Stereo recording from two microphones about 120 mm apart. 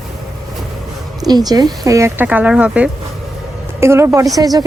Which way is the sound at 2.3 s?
10° right (ahead or behind).